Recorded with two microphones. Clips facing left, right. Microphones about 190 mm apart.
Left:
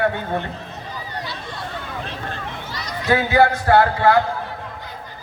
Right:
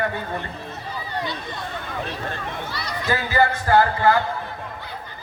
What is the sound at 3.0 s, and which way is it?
A man's voice, 70° left (ahead or behind).